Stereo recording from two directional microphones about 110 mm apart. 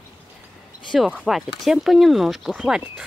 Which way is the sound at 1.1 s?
5° right (ahead or behind).